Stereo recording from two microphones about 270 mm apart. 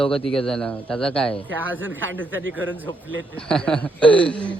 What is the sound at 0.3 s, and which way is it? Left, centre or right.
A man's voice, centre.